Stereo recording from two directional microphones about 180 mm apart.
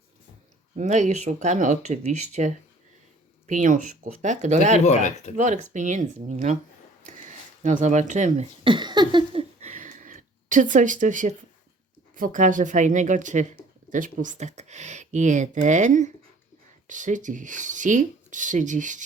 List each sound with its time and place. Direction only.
0.8 s speech: 40° right (ahead or behind)
4.9 s speech: 40° left (ahead or behind)
5.4 s speech: 45° right (ahead or behind)
7.0 s a sound: 45° right (ahead or behind)
8.6 s a sound: 25° right (ahead or behind); by 11.3 s 45° right (ahead or behind)
12.1 s speech: 45° right (ahead or behind)